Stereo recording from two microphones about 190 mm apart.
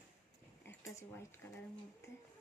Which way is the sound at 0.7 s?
15° left (ahead or behind).